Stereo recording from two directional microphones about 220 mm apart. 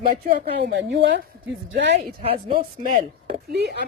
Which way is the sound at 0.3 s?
50° right (ahead or behind).